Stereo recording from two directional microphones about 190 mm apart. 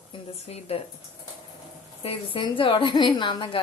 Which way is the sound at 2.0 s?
30° left (ahead or behind).